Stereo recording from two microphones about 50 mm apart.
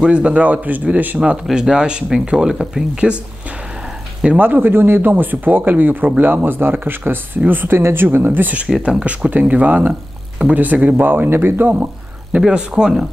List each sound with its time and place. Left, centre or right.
0.1 s speech: right
1.2 s speech: centre
4.4 s speech: right
7.7 s speech: right
8.8 s speech: right
11.2 s speech: right
12.4 s speech: centre